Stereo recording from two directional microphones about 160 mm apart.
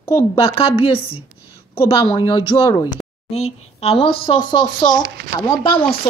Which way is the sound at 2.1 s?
30° left (ahead or behind).